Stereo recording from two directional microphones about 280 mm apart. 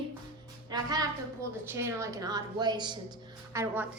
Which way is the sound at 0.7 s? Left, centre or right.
Centre.